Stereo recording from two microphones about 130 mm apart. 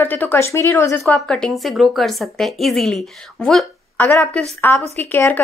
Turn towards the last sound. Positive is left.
turn(degrees=15)  # may be behind; listen again after turning